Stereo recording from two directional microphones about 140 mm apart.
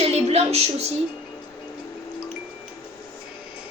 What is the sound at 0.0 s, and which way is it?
Music, 45° right (ahead or behind).